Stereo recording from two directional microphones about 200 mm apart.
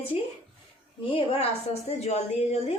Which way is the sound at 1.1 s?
30° left (ahead or behind).